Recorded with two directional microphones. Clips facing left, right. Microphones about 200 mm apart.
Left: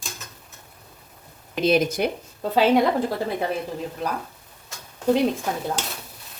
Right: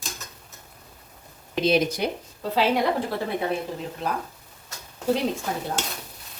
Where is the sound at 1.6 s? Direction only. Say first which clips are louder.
Left 2 dB; 50° left (ahead or behind).